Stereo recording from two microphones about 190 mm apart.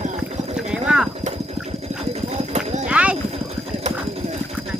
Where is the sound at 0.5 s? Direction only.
5° right (ahead or behind).